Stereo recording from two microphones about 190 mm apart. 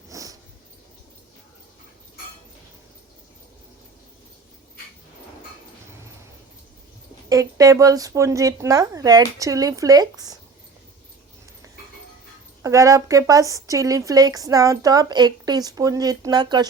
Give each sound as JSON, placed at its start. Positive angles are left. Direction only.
{"t": 0.1, "sound": "dog", "side_deg": -15}
{"t": 7.3, "sound": "speech", "side_deg": -20}
{"t": 12.6, "sound": "a woman's voice", "side_deg": -15}